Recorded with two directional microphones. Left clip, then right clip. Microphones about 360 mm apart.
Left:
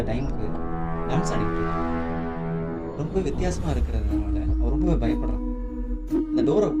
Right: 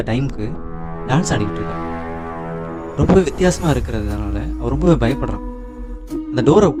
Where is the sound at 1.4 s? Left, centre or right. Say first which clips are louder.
Right 3 dB; centre.